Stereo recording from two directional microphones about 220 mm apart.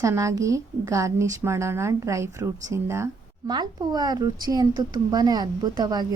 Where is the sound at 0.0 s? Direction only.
15° right (ahead or behind).